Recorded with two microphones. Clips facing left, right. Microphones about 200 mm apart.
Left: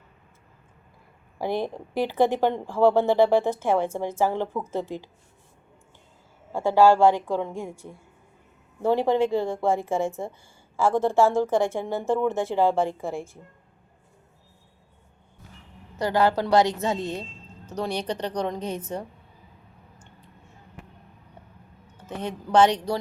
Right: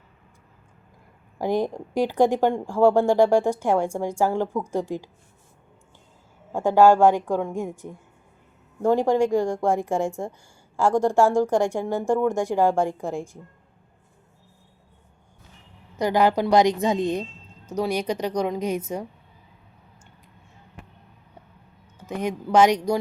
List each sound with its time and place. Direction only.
1.4 s speech: 15° right (ahead or behind)
6.5 s speech: 15° right (ahead or behind)
16.0 s speech: 15° right (ahead or behind)
21.9 s speech: 10° right (ahead or behind)